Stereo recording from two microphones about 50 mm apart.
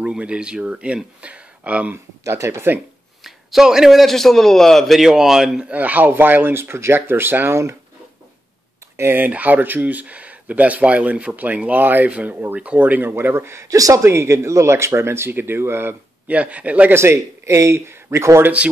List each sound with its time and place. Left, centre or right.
0.0 s speech: right
2.2 s speech: right
3.3 s a man's voice: centre
5.7 s speech: right
8.9 s speech: right
9.3 s speech: right
13.2 s speech: right
16.3 s speech: right
16.9 s speech: right